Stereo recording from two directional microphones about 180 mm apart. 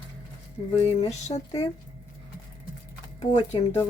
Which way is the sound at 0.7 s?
35° left (ahead or behind).